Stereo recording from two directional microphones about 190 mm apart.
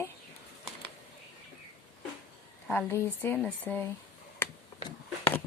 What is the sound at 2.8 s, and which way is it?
Speech, 10° left (ahead or behind).